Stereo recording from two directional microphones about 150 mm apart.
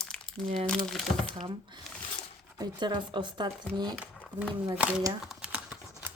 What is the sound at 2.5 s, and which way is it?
Speech, 30° right (ahead or behind).